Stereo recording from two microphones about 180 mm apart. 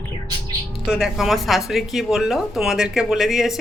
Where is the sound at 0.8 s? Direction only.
5° right (ahead or behind).